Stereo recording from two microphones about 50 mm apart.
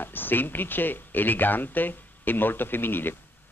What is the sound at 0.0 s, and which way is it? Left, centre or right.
Speech, left.